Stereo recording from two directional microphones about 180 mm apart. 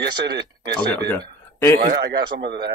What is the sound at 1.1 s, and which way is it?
Speech, 10° left (ahead or behind).